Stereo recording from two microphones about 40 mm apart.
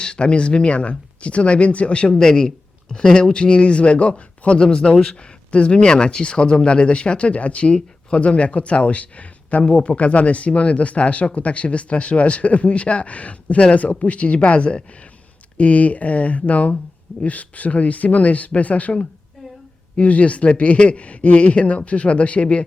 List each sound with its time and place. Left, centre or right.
0.0 s speech: left